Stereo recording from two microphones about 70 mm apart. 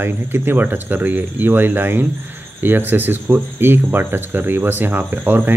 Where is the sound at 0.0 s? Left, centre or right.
Right.